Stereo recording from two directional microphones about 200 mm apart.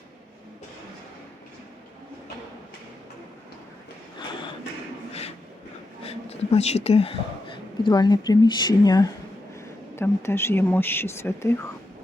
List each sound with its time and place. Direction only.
6.1 s speech: 30° left (ahead or behind); by 11.5 s 15° left (ahead or behind)